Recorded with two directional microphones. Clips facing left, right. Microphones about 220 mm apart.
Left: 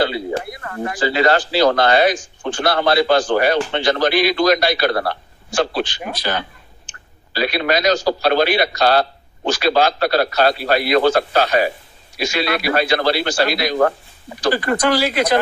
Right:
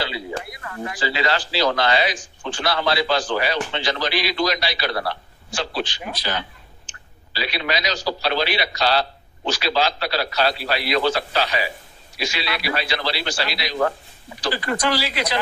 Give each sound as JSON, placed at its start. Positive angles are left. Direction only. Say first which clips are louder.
{"t": 0.0, "sound": "a man's voice", "louder": "left 8 dB", "side_deg": 50}